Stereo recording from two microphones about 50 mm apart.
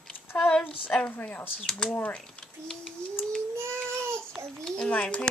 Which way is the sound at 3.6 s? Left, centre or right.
Right.